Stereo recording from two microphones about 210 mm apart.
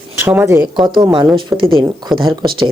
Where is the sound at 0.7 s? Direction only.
20° right (ahead or behind).